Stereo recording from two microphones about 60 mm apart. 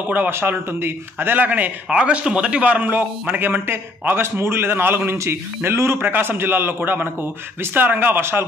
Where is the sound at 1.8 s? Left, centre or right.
Centre; by 5.2 s right.